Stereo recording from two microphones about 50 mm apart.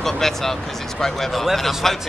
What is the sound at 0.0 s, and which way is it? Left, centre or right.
Speech, centre.